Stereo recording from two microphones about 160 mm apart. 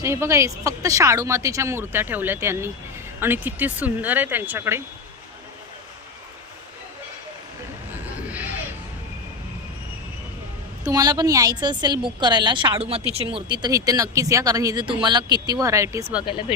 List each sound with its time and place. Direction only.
0.0 s speech: 15° right (ahead or behind)
8.3 s a sound: 10° right (ahead or behind)
10.8 s speech: 20° right (ahead or behind)